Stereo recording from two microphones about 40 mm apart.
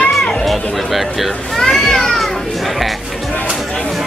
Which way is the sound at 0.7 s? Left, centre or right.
Centre.